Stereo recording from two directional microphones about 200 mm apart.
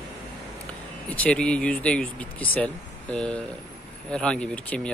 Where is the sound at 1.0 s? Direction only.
5° left (ahead or behind).